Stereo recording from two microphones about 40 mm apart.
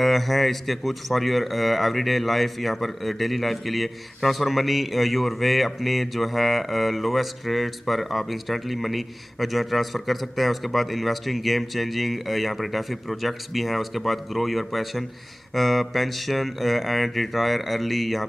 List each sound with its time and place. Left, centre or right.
0.0 s speech: centre